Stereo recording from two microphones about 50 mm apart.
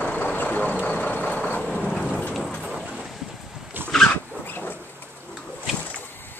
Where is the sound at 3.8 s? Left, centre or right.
Right.